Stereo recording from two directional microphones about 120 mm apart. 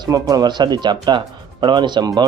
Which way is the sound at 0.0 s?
30° right (ahead or behind).